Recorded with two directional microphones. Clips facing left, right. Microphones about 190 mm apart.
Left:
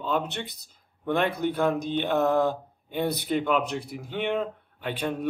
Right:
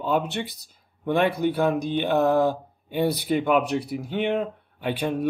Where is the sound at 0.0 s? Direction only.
10° right (ahead or behind).